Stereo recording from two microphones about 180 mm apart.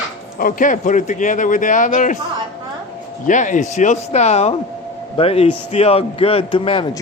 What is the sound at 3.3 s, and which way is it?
A man's voice, 45° left (ahead or behind).